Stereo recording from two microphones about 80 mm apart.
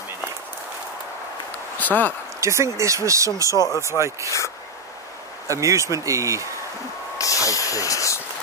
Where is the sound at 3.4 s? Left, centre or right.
Left.